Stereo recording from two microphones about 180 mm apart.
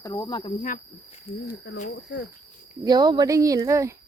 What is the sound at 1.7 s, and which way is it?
Speech, 65° left (ahead or behind).